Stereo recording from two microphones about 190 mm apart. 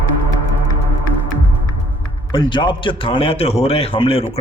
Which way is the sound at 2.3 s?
25° left (ahead or behind).